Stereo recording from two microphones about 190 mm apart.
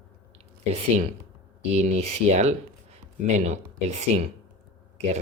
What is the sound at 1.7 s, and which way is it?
Speech, 35° right (ahead or behind).